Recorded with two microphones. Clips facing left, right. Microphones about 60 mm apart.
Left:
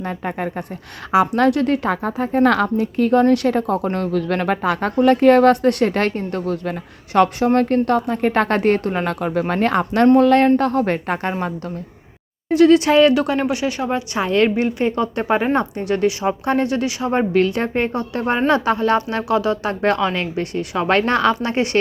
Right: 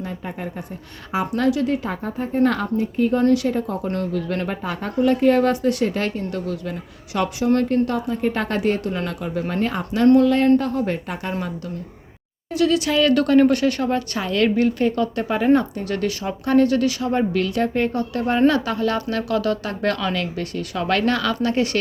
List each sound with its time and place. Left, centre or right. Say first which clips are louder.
0.0 s a woman's voice: left 5 dB; left
13.1 s speech: right 4 dB; centre
14.2 s speech: left 3 dB; left
15.5 s speech: left 1 dB; left